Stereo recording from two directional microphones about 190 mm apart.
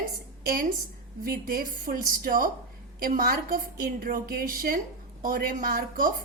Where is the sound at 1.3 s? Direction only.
50° right (ahead or behind).